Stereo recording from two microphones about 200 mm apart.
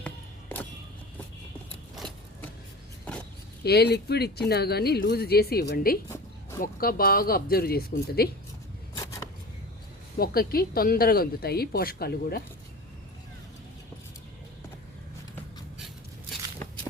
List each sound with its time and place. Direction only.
0.0 s a sound: 10° left (ahead or behind)
3.6 s speech: 55° left (ahead or behind)
10.2 s speech: 50° left (ahead or behind)